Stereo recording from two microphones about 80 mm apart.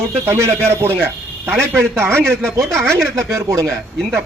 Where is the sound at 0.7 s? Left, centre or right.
Right.